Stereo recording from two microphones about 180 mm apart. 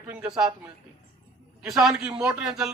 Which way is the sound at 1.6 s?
5° right (ahead or behind).